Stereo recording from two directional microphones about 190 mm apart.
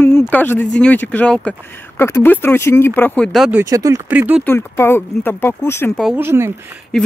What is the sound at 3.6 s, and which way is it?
Speech, 15° right (ahead or behind).